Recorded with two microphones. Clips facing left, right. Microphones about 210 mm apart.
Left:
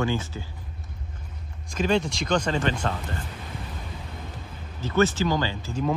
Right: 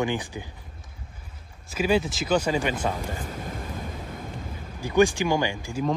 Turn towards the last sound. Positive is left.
turn(degrees=-15)  # may be behind; listen again after turning